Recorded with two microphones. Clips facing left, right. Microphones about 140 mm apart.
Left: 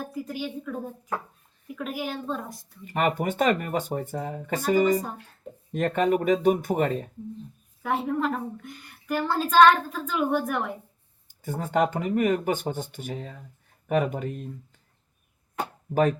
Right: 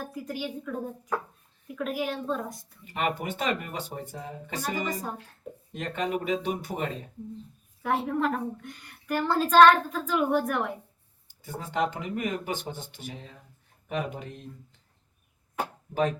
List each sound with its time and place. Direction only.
0.0 s a woman's voice: centre (ahead or behind)
2.8 s speech: 50° left (ahead or behind)
7.8 s a woman's voice: centre (ahead or behind)
11.3 s speech: 45° left (ahead or behind)